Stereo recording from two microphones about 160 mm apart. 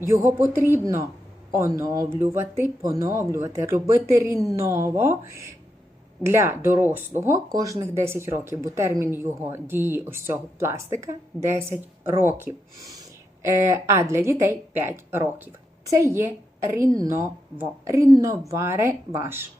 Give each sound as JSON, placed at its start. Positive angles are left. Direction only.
{"t": 0.0, "sound": "speech", "side_deg": -15}
{"t": 6.2, "sound": "speech", "side_deg": -15}